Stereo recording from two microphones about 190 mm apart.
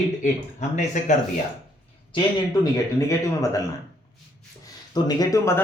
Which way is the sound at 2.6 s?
15° left (ahead or behind).